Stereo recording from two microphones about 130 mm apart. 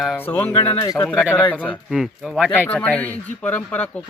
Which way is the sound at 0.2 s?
15° left (ahead or behind).